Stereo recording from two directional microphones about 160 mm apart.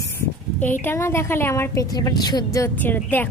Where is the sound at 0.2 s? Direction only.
15° left (ahead or behind).